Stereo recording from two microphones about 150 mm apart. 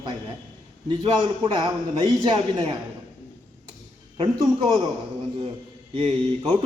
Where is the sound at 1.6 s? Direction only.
30° right (ahead or behind).